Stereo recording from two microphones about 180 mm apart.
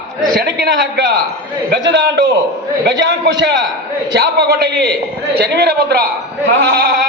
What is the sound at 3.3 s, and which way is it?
Speech, 75° right (ahead or behind).